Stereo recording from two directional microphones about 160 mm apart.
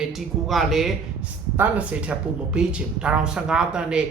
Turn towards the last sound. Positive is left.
turn(degrees=-5)  # may be behind; listen again after turning